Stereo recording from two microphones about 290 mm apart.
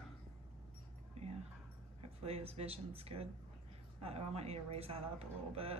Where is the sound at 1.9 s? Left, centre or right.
Right.